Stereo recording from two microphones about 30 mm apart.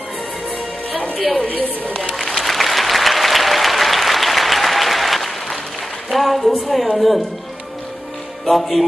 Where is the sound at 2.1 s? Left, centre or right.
Centre.